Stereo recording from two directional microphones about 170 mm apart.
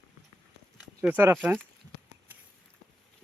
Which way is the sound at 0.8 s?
5° right (ahead or behind).